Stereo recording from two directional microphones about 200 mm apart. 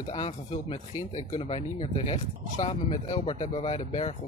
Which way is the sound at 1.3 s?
30° left (ahead or behind).